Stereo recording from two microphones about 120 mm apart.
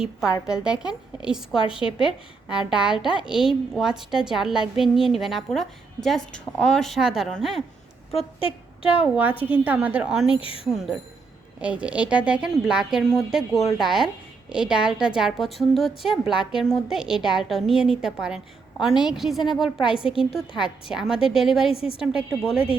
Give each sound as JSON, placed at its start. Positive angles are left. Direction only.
{"t": 0.4, "sound": "speech", "side_deg": -5}
{"t": 1.8, "sound": "speech", "side_deg": 45}
{"t": 2.5, "sound": "a woman's voice", "side_deg": -5}
{"t": 8.4, "sound": "a woman's voice", "side_deg": 50}
{"t": 9.0, "sound": "speech", "side_deg": -15}
{"t": 10.3, "sound": "speech", "side_deg": 50}
{"t": 11.6, "sound": "a woman's voice", "side_deg": -10}
{"t": 21.7, "sound": "speech", "side_deg": 50}
{"t": 21.9, "sound": "a woman's voice", "side_deg": -5}